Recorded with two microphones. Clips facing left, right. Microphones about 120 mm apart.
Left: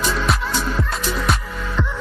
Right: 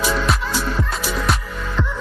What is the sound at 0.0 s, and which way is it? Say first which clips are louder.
Music: right 1 dB; 5° right (ahead or behind).